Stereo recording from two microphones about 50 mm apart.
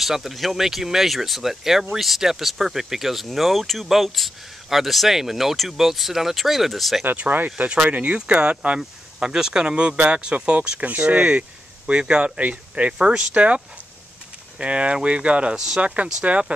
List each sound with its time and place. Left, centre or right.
0.0 s speech: centre
7.2 s speech: right
12.9 s speech: centre
14.6 s speech: right
15.5 s speech: centre